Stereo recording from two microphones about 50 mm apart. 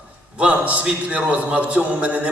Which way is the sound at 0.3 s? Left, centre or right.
Right.